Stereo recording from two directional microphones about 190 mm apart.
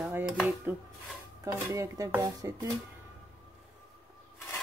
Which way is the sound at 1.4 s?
15° right (ahead or behind).